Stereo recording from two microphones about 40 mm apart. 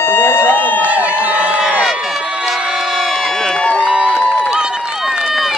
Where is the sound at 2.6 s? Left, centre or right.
Centre.